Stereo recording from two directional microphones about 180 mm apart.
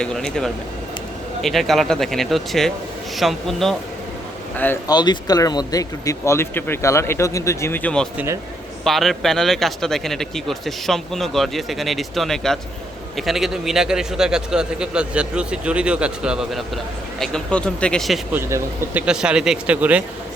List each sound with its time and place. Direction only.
0.0 s a man's voice: 5° left (ahead or behind)
4.9 s a man's voice: 20° left (ahead or behind); by 18.3 s centre (ahead or behind)
18.3 s speech: 15° right (ahead or behind)